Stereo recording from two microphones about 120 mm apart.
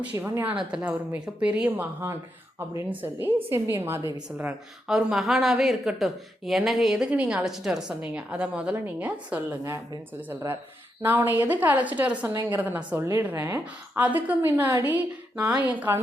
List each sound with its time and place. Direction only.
0.2 s a woman's voice: 10° right (ahead or behind)
4.9 s speech: 5° right (ahead or behind)